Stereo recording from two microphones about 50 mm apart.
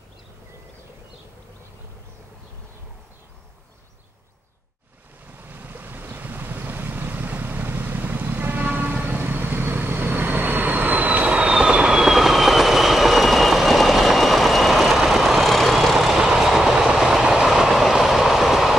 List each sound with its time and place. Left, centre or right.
5.4 s waves: right; by 15.4 s centre
15.4 s vehicle: centre
16.2 s train: centre